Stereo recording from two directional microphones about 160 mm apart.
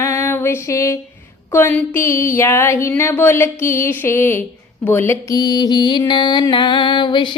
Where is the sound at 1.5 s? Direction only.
15° left (ahead or behind).